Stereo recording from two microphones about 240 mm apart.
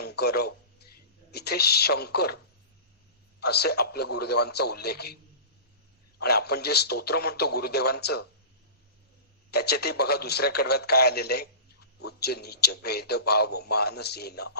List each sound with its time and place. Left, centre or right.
0.0 s a man's voice: left
3.4 s a man's voice: left
6.1 s a man's voice: left
9.5 s a man's voice: left